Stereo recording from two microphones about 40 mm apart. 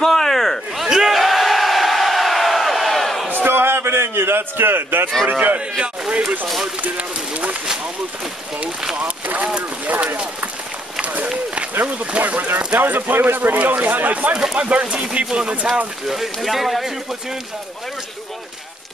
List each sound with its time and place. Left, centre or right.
0.0 s a sound: centre
0.8 s crowd: centre
3.3 s a sound: right
5.3 s speech: right
5.8 s speech: right
6.4 s speech: centre
6.8 s a sound: right
8.9 s a sound: right
9.8 s clip-clop: right
12.2 s speech: right
14.1 s speech: right
16.1 s speech: centre